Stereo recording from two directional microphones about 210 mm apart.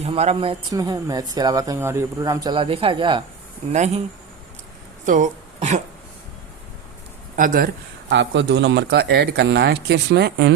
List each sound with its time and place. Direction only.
0.0 s speech: 30° right (ahead or behind)
5.0 s speech: 35° right (ahead or behind)
7.3 s speech: 40° right (ahead or behind)
8.1 s speech: 55° right (ahead or behind)